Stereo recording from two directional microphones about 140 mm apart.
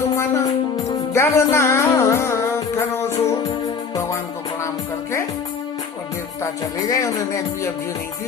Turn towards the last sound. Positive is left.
turn(degrees=25)  # may be behind; listen again after turning